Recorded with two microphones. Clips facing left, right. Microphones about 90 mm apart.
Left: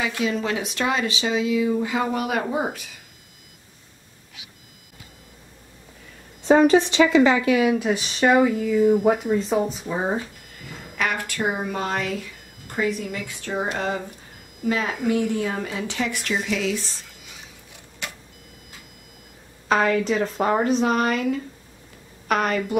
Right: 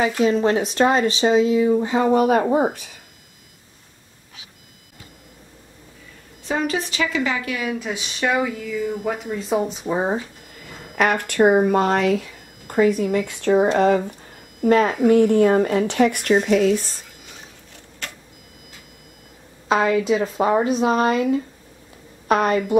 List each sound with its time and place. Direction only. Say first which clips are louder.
0.2 s speech: right 7 dB; 40° right (ahead or behind)
6.4 s a woman's voice: left 8 dB; 30° left (ahead or behind)
7.8 s speech: left 4 dB; 5° left (ahead or behind)
8.5 s speech: left 7 dB; 45° left (ahead or behind)
8.9 s speech: left 6 dB; 5° left (ahead or behind)
9.8 s speech: right 3 dB; 20° right (ahead or behind)
11.0 s a woman's voice: right 8 dB; 55° right (ahead or behind)
18.0 s a sound: even; 15° left (ahead or behind)
19.7 s a woman's voice: right 2 dB; 15° right (ahead or behind)
20.8 s speech: right 3 dB; 25° right (ahead or behind)